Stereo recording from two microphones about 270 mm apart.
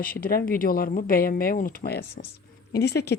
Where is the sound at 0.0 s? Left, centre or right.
Left.